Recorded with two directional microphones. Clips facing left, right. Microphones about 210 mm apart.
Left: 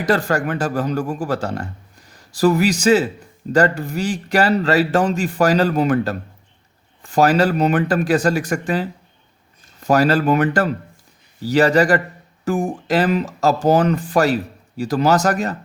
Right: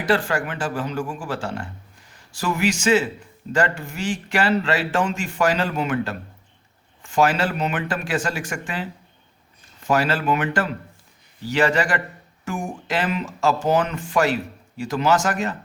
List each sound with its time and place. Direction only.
0.0 s speech: 40° left (ahead or behind)